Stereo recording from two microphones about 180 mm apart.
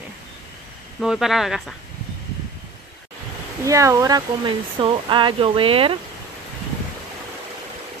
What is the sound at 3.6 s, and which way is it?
Speech, 20° right (ahead or behind).